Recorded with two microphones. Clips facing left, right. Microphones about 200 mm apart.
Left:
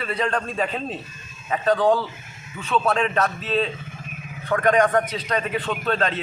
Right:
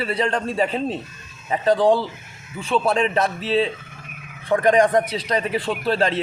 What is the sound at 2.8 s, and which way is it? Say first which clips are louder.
Speech: right 2 dB; 15° right (ahead or behind).